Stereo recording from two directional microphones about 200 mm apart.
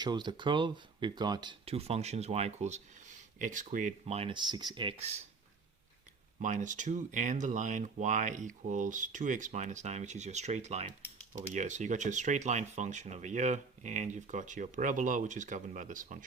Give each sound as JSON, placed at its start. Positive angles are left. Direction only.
{"t": 0.0, "sound": "speech", "side_deg": -20}
{"t": 4.0, "sound": "speech", "side_deg": -30}
{"t": 6.4, "sound": "speech", "side_deg": -40}